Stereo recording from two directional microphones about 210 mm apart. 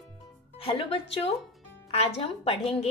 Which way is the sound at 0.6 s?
25° left (ahead or behind).